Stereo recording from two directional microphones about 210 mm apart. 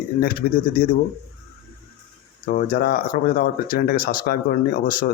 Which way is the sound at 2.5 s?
45° left (ahead or behind).